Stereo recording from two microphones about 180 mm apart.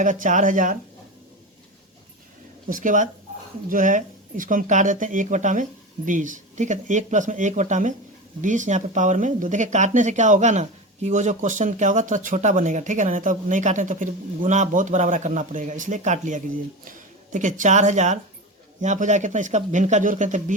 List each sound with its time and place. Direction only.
0.0 s speech: 45° right (ahead or behind)
2.6 s speech: 45° right (ahead or behind)